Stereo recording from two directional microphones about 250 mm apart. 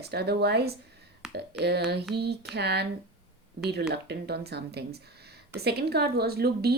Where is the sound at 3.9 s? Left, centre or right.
Right.